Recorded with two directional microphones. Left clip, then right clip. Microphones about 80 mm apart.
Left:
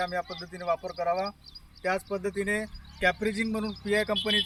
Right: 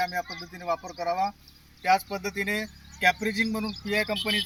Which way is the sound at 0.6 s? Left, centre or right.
Left.